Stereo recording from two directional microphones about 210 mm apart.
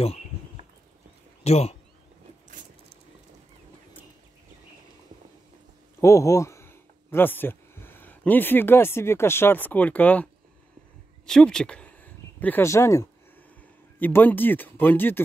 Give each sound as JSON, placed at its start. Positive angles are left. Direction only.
{"t": 1.4, "sound": "speech", "side_deg": 30}
{"t": 5.9, "sound": "speech", "side_deg": 15}